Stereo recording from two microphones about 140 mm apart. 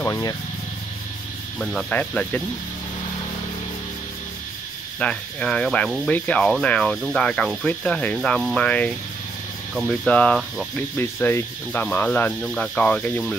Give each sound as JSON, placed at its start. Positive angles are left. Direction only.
{"t": 0.0, "sound": "speech", "side_deg": 25}
{"t": 1.6, "sound": "speech", "side_deg": 5}
{"t": 4.9, "sound": "speech", "side_deg": 10}